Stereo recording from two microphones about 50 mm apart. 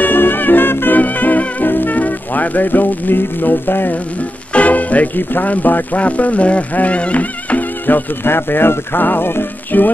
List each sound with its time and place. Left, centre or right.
0.0 s music: left
4.6 s speech: left